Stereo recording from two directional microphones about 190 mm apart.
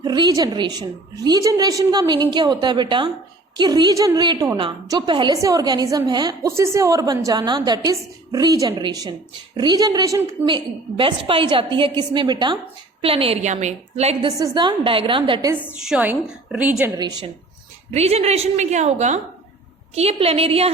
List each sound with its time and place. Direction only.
0.0 s a woman's voice: 20° right (ahead or behind)
15.5 s a woman's voice: centre (ahead or behind)
17.0 s a woman's voice: 20° right (ahead or behind)
17.9 s a woman's voice: 35° right (ahead or behind)